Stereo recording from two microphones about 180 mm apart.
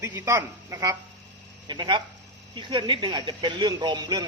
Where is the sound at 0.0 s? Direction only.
15° right (ahead or behind).